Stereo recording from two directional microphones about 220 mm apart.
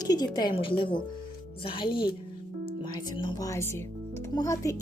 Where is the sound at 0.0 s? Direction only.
20° left (ahead or behind).